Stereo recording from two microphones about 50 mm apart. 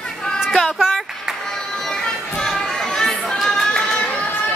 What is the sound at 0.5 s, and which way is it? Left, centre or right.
Speech, centre.